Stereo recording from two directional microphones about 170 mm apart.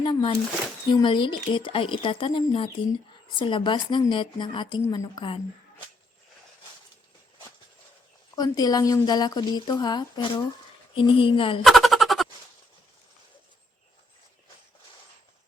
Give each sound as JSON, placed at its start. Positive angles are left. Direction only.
{"t": 0.0, "sound": "speech", "side_deg": 30}
{"t": 8.4, "sound": "speech", "side_deg": 20}
{"t": 11.6, "sound": "a sound", "side_deg": 0}